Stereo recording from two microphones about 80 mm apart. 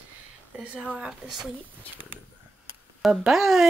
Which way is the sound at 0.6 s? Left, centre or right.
Centre.